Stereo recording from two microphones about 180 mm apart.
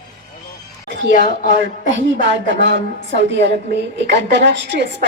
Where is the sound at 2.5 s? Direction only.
80° right.